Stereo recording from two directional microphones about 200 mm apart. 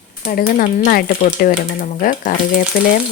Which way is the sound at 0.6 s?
45° left (ahead or behind).